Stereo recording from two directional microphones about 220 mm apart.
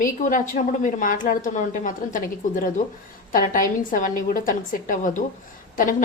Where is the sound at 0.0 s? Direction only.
35° left (ahead or behind).